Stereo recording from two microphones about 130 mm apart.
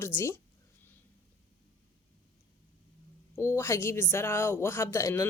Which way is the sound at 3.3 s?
20° left (ahead or behind).